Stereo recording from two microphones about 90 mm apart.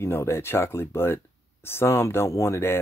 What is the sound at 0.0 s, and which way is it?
Speech, 30° left (ahead or behind).